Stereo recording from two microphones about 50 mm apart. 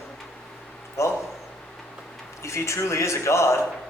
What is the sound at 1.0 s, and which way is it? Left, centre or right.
Speech, left.